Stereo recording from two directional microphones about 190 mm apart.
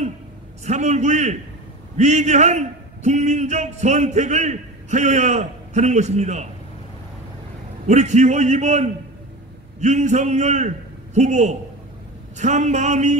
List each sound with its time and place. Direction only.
0.7 s a man's voice: 35° right (ahead or behind)
7.8 s a man's voice: 40° right (ahead or behind)